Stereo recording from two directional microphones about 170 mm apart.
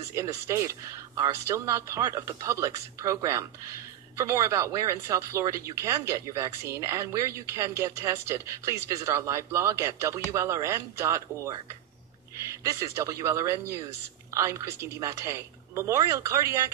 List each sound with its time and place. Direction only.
0.1 s speech: 15° right (ahead or behind)
12.6 s speech: 15° right (ahead or behind)